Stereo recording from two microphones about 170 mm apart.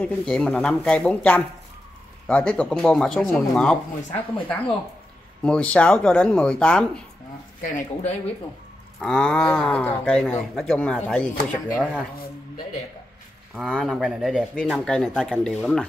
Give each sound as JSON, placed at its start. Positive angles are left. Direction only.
{"t": 0.0, "sound": "speech", "side_deg": 5}
{"t": 7.6, "sound": "speech", "side_deg": 45}
{"t": 9.0, "sound": "speech", "side_deg": 5}
{"t": 13.6, "sound": "speech", "side_deg": 0}